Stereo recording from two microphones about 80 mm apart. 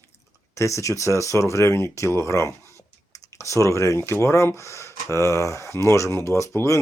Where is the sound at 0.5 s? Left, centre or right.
Left.